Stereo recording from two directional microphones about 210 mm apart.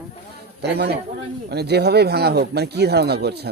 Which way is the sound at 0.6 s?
50° right (ahead or behind).